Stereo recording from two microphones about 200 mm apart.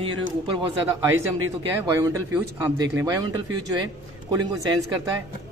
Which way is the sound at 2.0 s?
15° right (ahead or behind).